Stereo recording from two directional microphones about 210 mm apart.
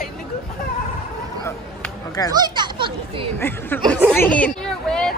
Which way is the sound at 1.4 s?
10° left (ahead or behind).